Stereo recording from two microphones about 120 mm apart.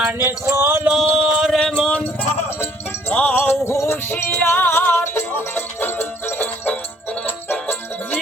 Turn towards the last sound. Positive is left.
turn(degrees=15)  # may be behind; listen again after turning